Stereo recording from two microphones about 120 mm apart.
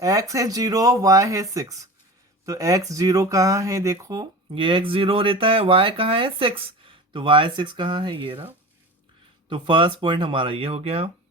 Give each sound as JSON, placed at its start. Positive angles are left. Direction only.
{"t": 0.0, "sound": "speech", "side_deg": -25}
{"t": 4.5, "sound": "speech", "side_deg": -45}
{"t": 9.5, "sound": "speech", "side_deg": -40}